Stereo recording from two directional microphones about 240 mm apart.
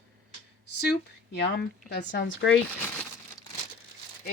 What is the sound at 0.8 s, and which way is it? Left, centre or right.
Speech, left.